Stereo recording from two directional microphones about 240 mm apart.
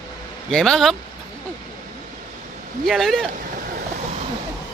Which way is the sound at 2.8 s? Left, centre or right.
Centre.